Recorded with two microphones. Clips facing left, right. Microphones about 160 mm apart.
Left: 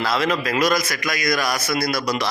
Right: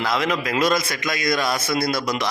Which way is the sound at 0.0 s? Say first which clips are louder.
Left 1 dB; 20° right (ahead or behind).